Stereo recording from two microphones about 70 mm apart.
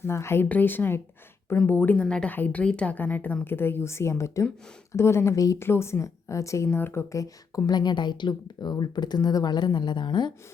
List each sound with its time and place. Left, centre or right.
0.0 s a woman's voice: left
0.4 s speech: left
2.0 s a woman's voice: centre
2.3 s a woman's voice: left
5.5 s speech: left
6.7 s a woman's voice: left
7.1 s speech: left
7.7 s speech: left